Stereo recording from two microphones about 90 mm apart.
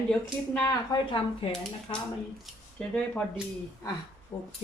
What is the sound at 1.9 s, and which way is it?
Speech, 90° left.